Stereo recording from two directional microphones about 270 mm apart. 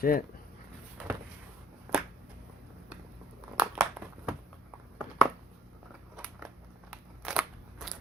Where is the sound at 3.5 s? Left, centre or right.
Centre.